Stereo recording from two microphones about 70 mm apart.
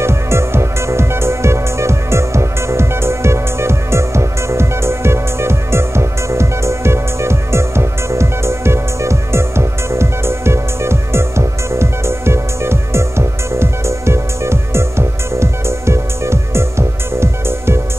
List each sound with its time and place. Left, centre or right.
0.0 s music: right